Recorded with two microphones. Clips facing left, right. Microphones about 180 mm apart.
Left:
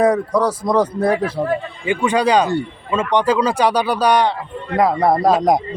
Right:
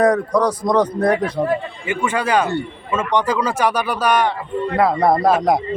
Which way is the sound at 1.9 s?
15° left (ahead or behind).